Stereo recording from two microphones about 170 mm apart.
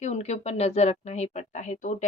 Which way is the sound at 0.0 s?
40° left (ahead or behind).